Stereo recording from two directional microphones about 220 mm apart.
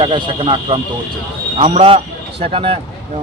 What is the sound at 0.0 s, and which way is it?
A man's voice, 20° right (ahead or behind).